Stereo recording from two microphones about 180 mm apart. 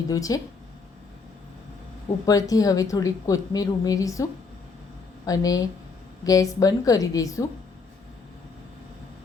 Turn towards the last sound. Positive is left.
turn(degrees=20)  # may be behind; listen again after turning